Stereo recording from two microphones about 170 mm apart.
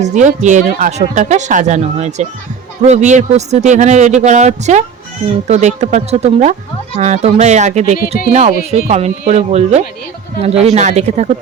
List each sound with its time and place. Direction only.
0.0 s speech: 45° right (ahead or behind)